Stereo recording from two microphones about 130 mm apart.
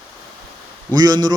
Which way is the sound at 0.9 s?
30° right (ahead or behind).